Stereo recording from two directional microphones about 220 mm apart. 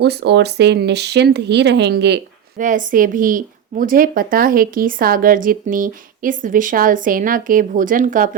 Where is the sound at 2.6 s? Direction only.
35° right (ahead or behind).